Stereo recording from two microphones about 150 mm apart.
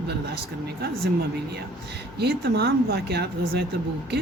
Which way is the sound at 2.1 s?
90° right.